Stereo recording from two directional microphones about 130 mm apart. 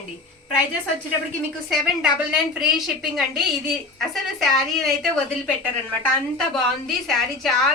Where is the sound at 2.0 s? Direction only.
5° right (ahead or behind).